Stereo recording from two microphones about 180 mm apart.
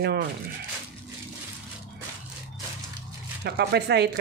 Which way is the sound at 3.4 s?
65° right (ahead or behind).